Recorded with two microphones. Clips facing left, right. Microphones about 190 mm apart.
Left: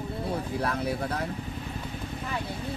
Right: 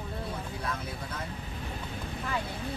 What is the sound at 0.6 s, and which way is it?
Speech, 65° left (ahead or behind).